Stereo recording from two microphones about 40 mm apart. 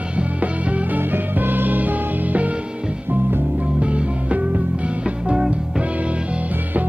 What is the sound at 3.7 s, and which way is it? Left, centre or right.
Music, right.